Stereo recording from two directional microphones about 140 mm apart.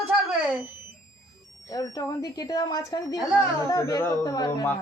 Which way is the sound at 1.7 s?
25° left (ahead or behind).